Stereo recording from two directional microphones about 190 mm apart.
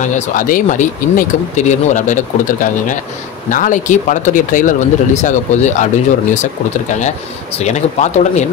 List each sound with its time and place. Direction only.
0.0 s speech: 40° left (ahead or behind)
7.0 s speech: 35° left (ahead or behind)